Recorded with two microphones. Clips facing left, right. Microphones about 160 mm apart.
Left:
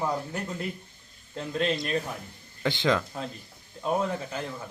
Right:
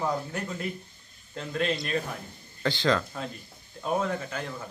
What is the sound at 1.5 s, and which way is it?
A man's voice, 25° left (ahead or behind).